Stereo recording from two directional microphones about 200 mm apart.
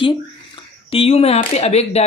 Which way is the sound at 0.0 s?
25° left (ahead or behind).